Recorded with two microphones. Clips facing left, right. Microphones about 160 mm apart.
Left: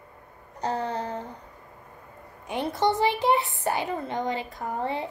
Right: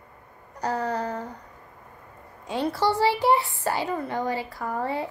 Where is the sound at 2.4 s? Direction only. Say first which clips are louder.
Right 1 dB; 20° left (ahead or behind).